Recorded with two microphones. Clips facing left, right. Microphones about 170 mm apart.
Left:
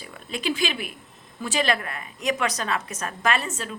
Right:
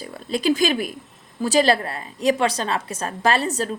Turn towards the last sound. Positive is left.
turn(degrees=-35)  # may be behind; listen again after turning